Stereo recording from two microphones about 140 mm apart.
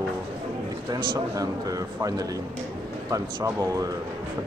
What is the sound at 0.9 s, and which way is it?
Speech, 25° right (ahead or behind).